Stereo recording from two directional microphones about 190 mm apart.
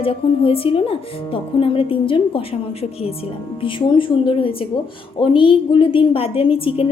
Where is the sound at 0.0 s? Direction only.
30° left (ahead or behind).